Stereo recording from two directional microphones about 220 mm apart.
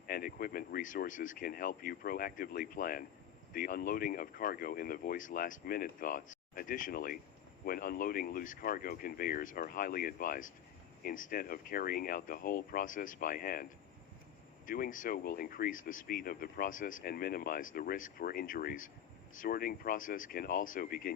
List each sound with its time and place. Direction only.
0.1 s speech: 40° left (ahead or behind)
14.7 s speech: 35° left (ahead or behind)